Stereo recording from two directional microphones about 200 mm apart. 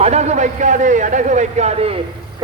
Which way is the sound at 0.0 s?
35° right (ahead or behind).